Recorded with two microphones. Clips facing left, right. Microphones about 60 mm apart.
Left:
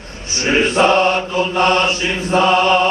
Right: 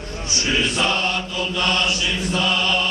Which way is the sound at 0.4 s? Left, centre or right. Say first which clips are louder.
Left 8 dB; left.